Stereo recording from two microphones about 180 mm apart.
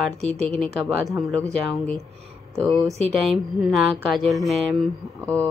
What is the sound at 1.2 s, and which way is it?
Speech, 15° right (ahead or behind).